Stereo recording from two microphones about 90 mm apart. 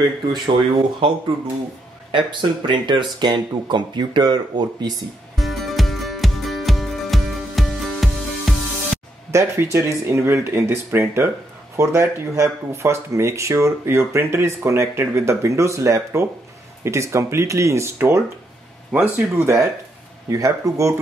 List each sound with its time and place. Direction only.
0.3 s speech: 60° right (ahead or behind)
2.1 s speech: 60° right (ahead or behind)
5.3 s music: centre (ahead or behind)
9.3 s speech: 30° right (ahead or behind)
18.9 s speech: 15° right (ahead or behind)
19.4 s speech: 35° right (ahead or behind)